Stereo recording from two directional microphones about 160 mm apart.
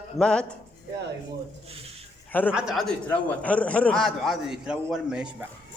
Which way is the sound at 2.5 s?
5° right (ahead or behind).